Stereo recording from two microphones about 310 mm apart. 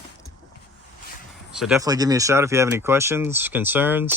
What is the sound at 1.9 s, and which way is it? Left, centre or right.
Speech, centre.